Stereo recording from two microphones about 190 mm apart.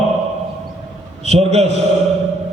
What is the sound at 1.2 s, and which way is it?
Speech, 35° right (ahead or behind).